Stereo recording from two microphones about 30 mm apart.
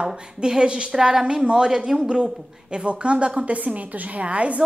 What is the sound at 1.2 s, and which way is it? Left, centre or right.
A woman's voice, right.